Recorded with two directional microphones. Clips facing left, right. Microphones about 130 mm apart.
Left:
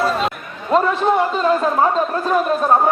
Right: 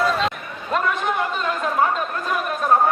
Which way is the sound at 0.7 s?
30° left (ahead or behind).